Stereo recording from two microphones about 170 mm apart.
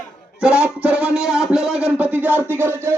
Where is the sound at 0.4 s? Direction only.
5° right (ahead or behind).